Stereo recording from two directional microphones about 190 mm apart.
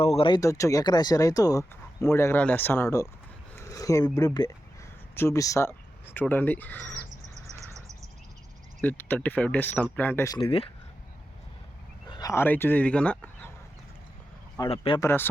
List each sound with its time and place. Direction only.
0.0 s speech: 30° left (ahead or behind); by 3.1 s 15° left (ahead or behind)
3.5 s a sound: 15° left (ahead or behind)
5.1 s speech: 15° left (ahead or behind)
8.8 s speech: 10° left (ahead or behind)
10.3 s speech: 30° left (ahead or behind)
12.1 s speech: 15° left (ahead or behind)
14.7 s speech: 25° left (ahead or behind)
15.0 s speech: 10° left (ahead or behind)